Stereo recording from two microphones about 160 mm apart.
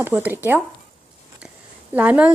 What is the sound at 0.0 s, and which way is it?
Speech, 10° right (ahead or behind).